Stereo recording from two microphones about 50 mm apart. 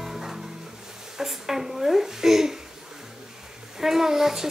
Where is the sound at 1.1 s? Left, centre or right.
Centre.